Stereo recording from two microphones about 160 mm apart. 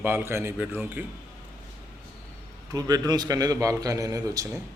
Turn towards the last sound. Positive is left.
turn(degrees=-20)  # may be behind; listen again after turning